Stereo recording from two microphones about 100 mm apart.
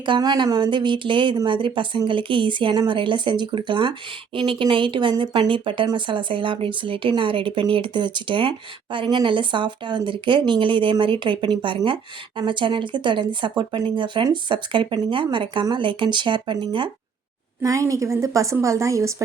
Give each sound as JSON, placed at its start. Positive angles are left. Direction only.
{"t": 0.0, "sound": "speech", "side_deg": -45}
{"t": 17.6, "sound": "a woman's voice", "side_deg": -35}